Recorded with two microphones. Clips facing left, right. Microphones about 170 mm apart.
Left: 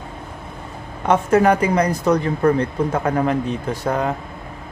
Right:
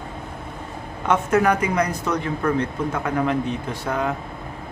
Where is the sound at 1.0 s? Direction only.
30° left (ahead or behind).